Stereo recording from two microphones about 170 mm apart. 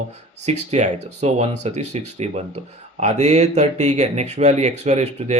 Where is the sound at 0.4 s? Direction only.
40° right (ahead or behind).